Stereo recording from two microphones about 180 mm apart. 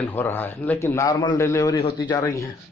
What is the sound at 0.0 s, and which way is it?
A man's voice, 10° left (ahead or behind).